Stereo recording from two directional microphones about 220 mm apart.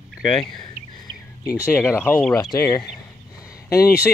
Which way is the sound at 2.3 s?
20° left (ahead or behind).